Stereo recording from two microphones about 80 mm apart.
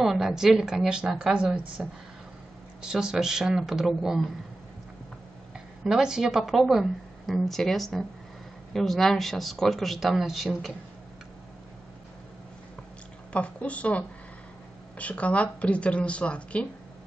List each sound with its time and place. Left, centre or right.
0.0 s a woman's voice: centre
5.9 s speech: centre
13.3 s speech: centre